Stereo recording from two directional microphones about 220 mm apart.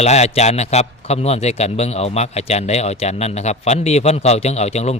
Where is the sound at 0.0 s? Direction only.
30° left (ahead or behind).